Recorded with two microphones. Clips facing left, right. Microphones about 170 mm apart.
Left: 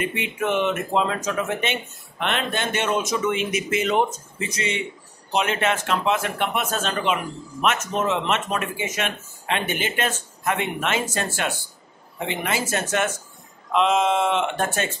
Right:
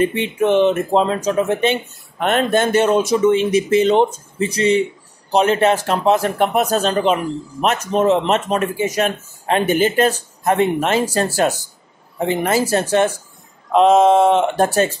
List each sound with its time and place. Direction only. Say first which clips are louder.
0.0 s speech: right 9 dB; 30° right (ahead or behind)